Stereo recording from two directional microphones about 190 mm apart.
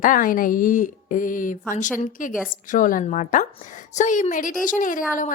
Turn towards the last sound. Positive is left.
turn(degrees=45)  # may be behind; listen again after turning